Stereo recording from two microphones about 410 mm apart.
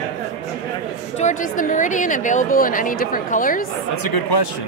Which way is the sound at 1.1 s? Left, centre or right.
Centre.